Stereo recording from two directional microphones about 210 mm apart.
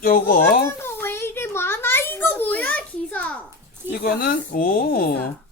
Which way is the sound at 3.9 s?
50° left (ahead or behind).